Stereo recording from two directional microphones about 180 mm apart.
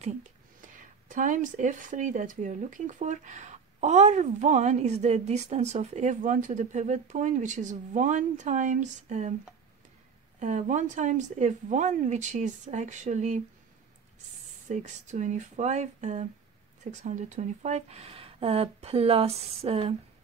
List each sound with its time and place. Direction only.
0.0 s speech: 45° right (ahead or behind)
10.4 s speech: 40° right (ahead or behind)
14.7 s speech: 40° right (ahead or behind)